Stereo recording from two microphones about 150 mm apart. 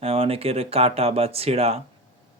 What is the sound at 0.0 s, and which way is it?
Speech, 40° right (ahead or behind).